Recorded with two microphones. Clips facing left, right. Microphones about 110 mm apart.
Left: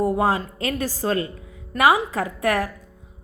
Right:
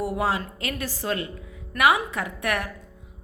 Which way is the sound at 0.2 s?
35° left (ahead or behind).